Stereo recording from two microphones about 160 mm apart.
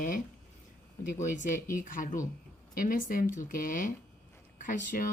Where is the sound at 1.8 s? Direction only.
55° left (ahead or behind).